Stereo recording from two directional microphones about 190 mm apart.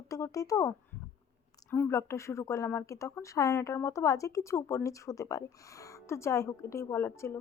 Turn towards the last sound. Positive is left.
turn(degrees=15)  # may be behind; listen again after turning